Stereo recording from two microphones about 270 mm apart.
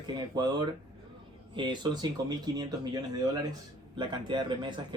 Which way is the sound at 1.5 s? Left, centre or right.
Centre.